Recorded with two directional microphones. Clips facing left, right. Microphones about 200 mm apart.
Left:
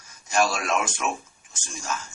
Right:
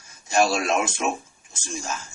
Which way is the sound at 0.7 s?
25° right (ahead or behind).